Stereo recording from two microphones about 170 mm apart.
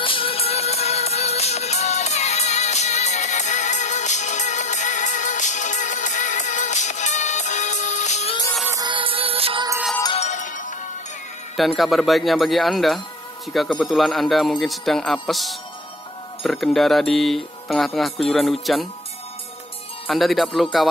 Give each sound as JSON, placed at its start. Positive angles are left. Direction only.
{"t": 0.0, "sound": "music", "side_deg": 30}
{"t": 8.6, "sound": "music", "side_deg": -25}
{"t": 10.1, "sound": "music", "side_deg": 45}
{"t": 11.5, "sound": "speech", "side_deg": 0}
{"t": 20.1, "sound": "speech", "side_deg": 0}